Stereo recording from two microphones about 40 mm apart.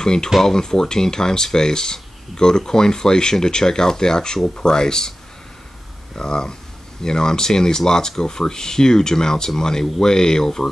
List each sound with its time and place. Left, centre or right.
0.0 s speech: centre
6.1 s speech: centre